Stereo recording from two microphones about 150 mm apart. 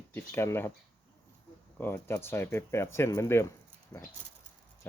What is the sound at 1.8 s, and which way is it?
Speech, 15° left (ahead or behind).